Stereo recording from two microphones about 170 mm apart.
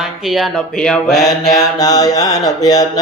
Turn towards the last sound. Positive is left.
turn(degrees=20)  # may be behind; listen again after turning